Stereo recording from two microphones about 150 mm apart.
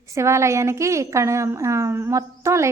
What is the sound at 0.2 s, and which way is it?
A woman's voice, 20° right (ahead or behind).